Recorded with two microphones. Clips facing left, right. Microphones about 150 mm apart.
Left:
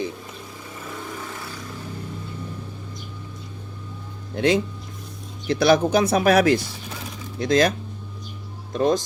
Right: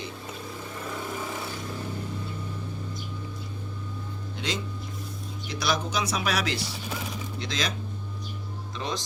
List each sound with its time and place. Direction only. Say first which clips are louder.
4.4 s speech: left 13 dB; 55° left (ahead or behind)
8.7 s speech: left 13 dB; 50° left (ahead or behind)